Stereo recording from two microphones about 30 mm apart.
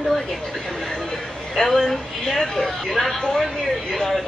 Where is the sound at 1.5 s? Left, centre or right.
Centre.